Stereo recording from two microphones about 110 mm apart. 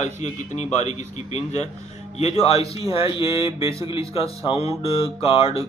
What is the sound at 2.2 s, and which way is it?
Speech, 75° left (ahead or behind).